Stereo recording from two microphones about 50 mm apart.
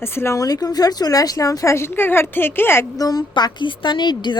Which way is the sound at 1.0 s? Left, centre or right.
Left.